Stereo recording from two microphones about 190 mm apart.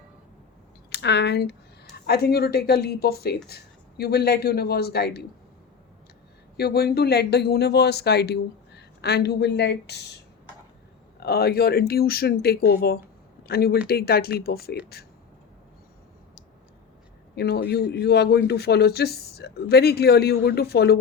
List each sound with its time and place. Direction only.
0.9 s a man's voice: 60° left (ahead or behind)
6.6 s a man's voice: 55° left (ahead or behind)
11.2 s a man's voice: 55° left (ahead or behind)
17.3 s a man's voice: 60° left (ahead or behind)